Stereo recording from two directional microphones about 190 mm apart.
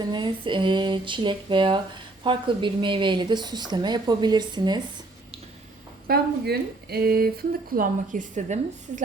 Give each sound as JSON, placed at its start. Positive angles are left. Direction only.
{"t": 0.1, "sound": "speech", "side_deg": -25}
{"t": 6.1, "sound": "speech", "side_deg": -55}